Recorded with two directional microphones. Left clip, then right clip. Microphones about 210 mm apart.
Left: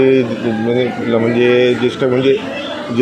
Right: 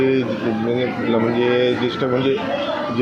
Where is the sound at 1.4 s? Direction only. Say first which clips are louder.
Left 6 dB; 50° left (ahead or behind).